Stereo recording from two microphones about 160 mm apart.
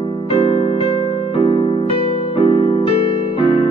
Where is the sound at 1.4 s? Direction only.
30° left (ahead or behind).